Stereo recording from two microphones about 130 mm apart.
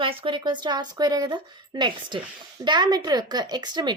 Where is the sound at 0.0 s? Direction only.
40° right (ahead or behind).